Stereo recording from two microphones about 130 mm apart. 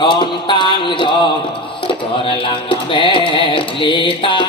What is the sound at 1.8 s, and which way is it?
Music, 40° left (ahead or behind).